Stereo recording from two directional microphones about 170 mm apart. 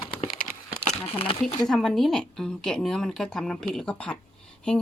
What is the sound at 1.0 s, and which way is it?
Speech, 35° left (ahead or behind).